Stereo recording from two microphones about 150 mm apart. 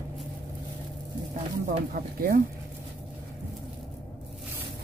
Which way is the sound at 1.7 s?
80° right.